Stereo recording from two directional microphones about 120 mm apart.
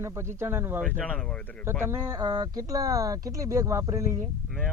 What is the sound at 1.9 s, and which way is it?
Speech, 25° right (ahead or behind).